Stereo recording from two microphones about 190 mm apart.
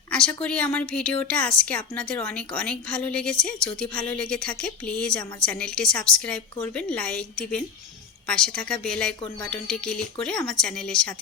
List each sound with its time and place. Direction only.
0.1 s a woman's voice: 5° left (ahead or behind)